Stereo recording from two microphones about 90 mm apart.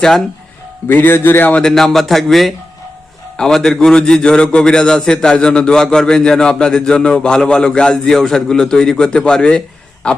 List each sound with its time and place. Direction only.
0.9 s a man's voice: 25° left (ahead or behind)
1.6 s a man's voice: 5° left (ahead or behind)